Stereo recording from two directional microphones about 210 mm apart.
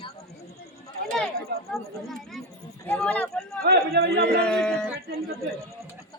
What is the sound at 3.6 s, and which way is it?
Speech, 50° right (ahead or behind).